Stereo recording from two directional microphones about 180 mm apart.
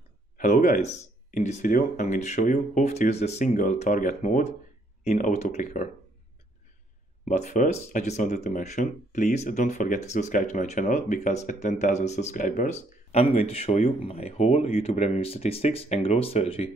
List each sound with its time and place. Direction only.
0.4 s speech: 45° left (ahead or behind)
7.2 s speech: 45° left (ahead or behind)